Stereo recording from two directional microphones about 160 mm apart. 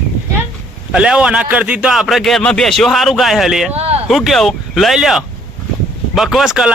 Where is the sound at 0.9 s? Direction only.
5° right (ahead or behind).